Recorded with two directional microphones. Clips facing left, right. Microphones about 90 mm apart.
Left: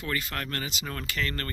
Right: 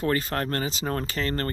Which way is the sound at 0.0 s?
35° right (ahead or behind).